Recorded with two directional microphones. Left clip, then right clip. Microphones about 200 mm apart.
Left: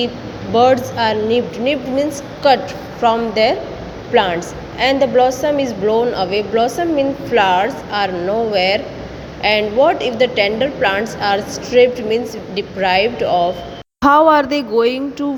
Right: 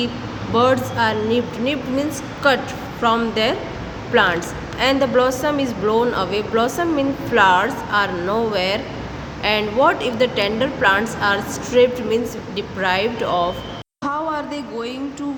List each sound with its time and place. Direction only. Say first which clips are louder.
0.5 s a woman's voice: left 4 dB; 10° left (ahead or behind)
14.0 s a woman's voice: left 13 dB; 40° left (ahead or behind)